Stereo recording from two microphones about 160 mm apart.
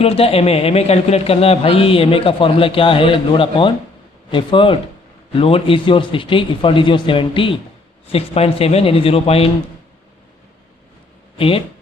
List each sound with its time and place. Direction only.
0.0 s a man's voice: 40° left (ahead or behind)
11.3 s speech: 35° left (ahead or behind)